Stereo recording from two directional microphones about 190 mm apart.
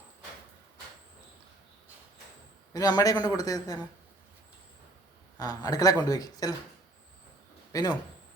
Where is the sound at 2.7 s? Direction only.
20° left (ahead or behind).